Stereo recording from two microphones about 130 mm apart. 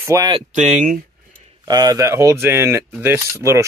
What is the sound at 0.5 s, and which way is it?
Speech, 70° right (ahead or behind).